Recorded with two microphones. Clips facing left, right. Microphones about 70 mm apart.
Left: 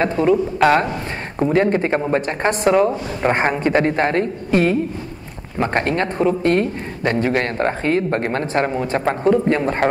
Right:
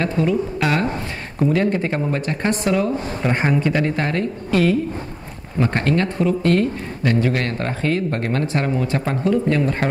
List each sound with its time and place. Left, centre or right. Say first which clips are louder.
0.0 s a man's voice: left 4 dB; left
1.4 s a man's voice: left 2 dB; left